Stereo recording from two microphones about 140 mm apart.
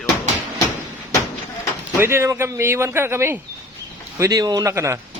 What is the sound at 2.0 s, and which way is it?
Speech, 20° right (ahead or behind).